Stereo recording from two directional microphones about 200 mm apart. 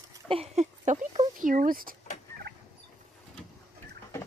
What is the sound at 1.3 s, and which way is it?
Speech, 45° right (ahead or behind).